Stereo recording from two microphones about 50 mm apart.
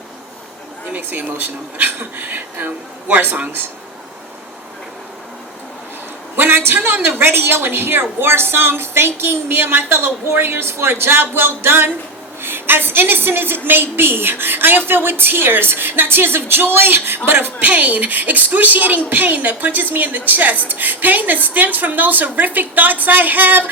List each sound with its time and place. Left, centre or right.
0.9 s a woman's voice: right
6.3 s a man's voice: right
17.6 s a woman's voice: right